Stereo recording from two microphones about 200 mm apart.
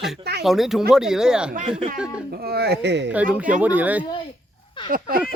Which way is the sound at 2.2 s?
50° right (ahead or behind).